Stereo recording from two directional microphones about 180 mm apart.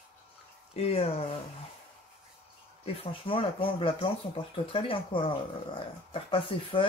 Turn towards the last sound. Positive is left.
turn(degrees=30)  # may be behind; listen again after turning